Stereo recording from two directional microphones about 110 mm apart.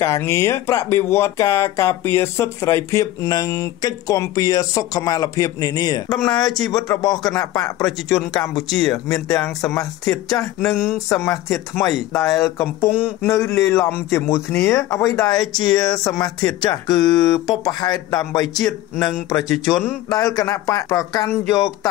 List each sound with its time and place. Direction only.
0.0 s speech: 25° left (ahead or behind)
8.6 s speech: 5° left (ahead or behind)
8.9 s speech: 30° left (ahead or behind)
15.4 s speech: 5° left (ahead or behind)
15.9 s speech: 35° left (ahead or behind)
19.5 s speech: 5° right (ahead or behind)
20.1 s speech: 30° left (ahead or behind)